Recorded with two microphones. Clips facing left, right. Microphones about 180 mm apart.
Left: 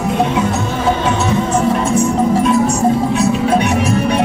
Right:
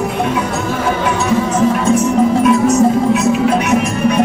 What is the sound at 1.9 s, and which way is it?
Music, 30° left (ahead or behind).